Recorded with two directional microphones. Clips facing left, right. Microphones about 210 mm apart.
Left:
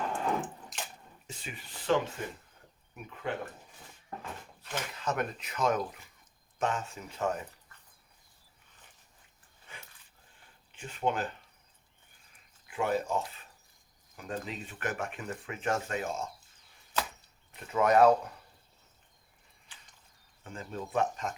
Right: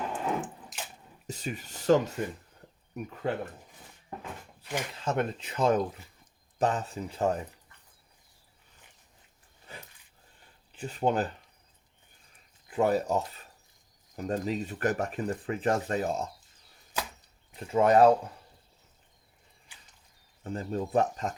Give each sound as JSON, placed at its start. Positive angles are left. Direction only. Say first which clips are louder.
{"t": 0.1, "sound": "drip", "louder": "even", "side_deg": -5}
{"t": 1.3, "sound": "speech", "louder": "right 9 dB", "side_deg": -40}
{"t": 4.9, "sound": "speech", "louder": "right 3 dB", "side_deg": -30}
{"t": 9.7, "sound": "dog", "louder": "right 5 dB", "side_deg": -40}
{"t": 10.7, "sound": "speech", "louder": "right 4 dB", "side_deg": -35}
{"t": 12.6, "sound": "speech", "louder": "right 5 dB", "side_deg": -35}
{"t": 17.6, "sound": "speech", "louder": "right 3 dB", "side_deg": -30}
{"t": 19.7, "sound": "a sound", "louder": "left 1 dB", "side_deg": -10}
{"t": 20.4, "sound": "speech", "louder": "right 7 dB", "side_deg": -40}